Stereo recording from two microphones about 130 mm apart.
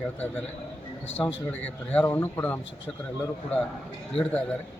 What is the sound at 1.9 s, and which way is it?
A man's voice, 15° left (ahead or behind).